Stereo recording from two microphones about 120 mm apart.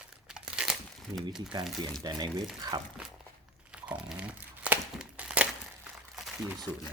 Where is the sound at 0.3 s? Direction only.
5° right (ahead or behind).